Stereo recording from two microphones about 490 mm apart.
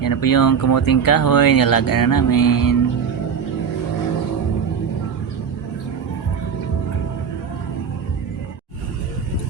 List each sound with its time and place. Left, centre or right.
0.0 s speech: left